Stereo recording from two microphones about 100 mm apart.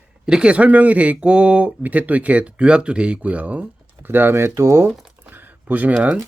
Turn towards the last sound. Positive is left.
turn(degrees=-15)  # may be behind; listen again after turning